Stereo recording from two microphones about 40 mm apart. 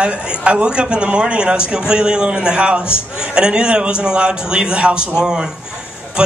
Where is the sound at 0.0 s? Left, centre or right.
Right.